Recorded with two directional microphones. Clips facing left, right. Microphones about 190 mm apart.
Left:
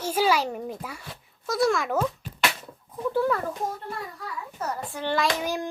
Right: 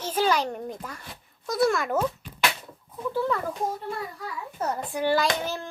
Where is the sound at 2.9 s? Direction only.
10° left (ahead or behind).